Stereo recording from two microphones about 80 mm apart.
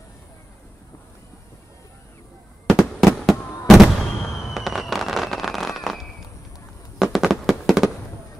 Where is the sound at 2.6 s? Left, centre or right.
Centre.